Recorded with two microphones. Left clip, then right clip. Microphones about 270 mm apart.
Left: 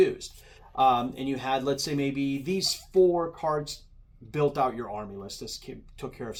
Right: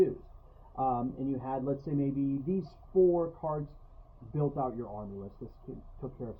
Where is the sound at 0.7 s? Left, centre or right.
Left.